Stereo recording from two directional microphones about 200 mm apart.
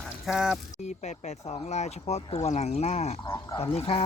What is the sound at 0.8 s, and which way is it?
Speech, 35° left (ahead or behind).